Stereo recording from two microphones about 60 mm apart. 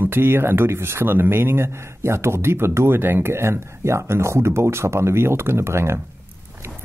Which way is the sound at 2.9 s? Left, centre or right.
Right.